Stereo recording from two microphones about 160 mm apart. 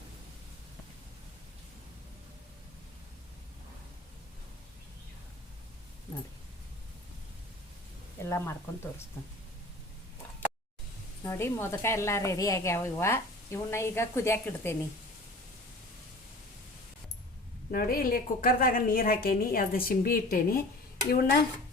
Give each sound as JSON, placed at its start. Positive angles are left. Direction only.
{"t": 8.2, "sound": "a woman's voice", "side_deg": 15}
{"t": 11.2, "sound": "a woman's voice", "side_deg": 15}
{"t": 17.7, "sound": "a woman's voice", "side_deg": 65}